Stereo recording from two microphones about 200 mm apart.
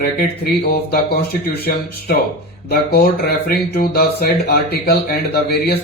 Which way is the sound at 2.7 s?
50° left (ahead or behind).